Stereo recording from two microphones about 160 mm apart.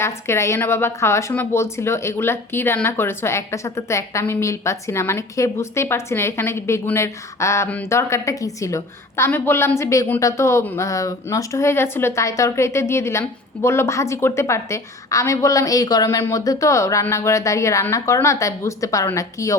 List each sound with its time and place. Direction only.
0.0 s a woman's voice: 15° left (ahead or behind)